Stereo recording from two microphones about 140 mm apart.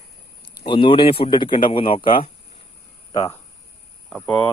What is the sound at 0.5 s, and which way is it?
A man's voice, 35° left (ahead or behind).